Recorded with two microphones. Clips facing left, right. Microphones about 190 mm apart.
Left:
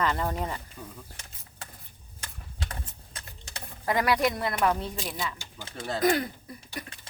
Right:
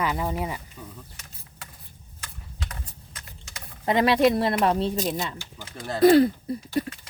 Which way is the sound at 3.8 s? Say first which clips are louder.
Right 6 dB; 25° right (ahead or behind).